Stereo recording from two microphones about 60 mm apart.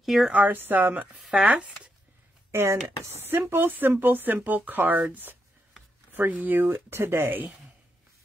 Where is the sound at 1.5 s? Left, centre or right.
Right.